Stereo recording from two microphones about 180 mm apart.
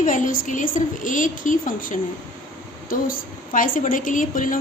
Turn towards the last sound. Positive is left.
turn(degrees=50)  # may be behind; listen again after turning